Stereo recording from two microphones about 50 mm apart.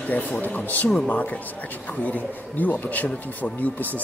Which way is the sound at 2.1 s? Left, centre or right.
Left.